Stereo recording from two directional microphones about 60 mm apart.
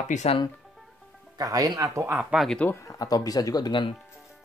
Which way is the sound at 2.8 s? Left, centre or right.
Left.